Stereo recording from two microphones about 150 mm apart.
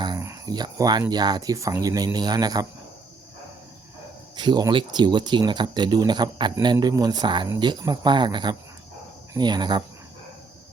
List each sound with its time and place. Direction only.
0.2 s speech: 20° right (ahead or behind)
4.4 s speech: 30° right (ahead or behind)